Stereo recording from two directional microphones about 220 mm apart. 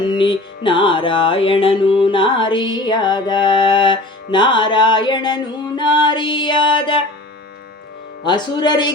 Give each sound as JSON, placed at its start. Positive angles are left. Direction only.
{"t": 0.1, "sound": "music", "side_deg": 20}
{"t": 8.2, "sound": "music", "side_deg": 20}